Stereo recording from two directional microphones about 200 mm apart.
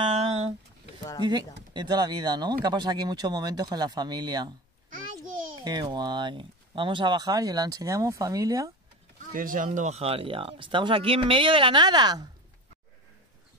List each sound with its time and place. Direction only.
0.0 s a sound: 30° right (ahead or behind)
1.7 s speech: 20° right (ahead or behind)
5.6 s speech: 20° right (ahead or behind)
9.3 s speech: 45° right (ahead or behind)
9.7 s speech: 35° right (ahead or behind)